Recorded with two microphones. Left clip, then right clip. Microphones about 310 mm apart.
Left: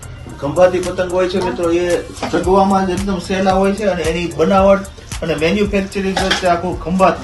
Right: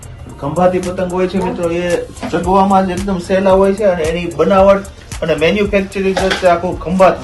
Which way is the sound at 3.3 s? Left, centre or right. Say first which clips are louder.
Right 4 dB; centre.